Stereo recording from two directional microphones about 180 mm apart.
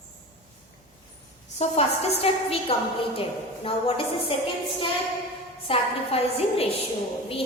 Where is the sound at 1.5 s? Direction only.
35° left (ahead or behind).